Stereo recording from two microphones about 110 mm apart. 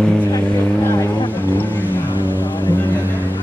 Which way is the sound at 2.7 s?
15° left (ahead or behind).